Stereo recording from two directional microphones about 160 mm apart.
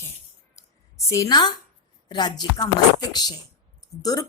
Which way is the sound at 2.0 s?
25° left (ahead or behind).